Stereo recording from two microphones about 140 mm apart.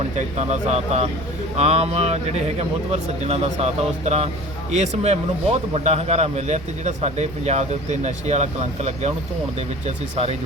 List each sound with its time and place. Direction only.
0.0 s speech: 50° right (ahead or behind)